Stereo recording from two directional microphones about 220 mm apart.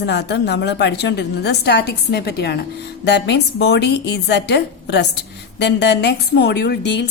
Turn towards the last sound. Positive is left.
turn(degrees=50)  # may be behind; listen again after turning